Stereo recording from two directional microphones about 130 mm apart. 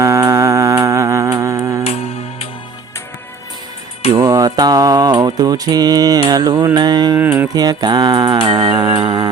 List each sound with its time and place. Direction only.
0.0 s a sound: 25° right (ahead or behind)
4.1 s mantra: 25° right (ahead or behind)
6.7 s music: 30° right (ahead or behind)
7.2 s speech: 20° right (ahead or behind)
7.5 s music: 30° right (ahead or behind)